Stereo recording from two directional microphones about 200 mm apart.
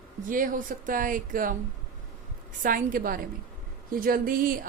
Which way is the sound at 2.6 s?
45° right (ahead or behind).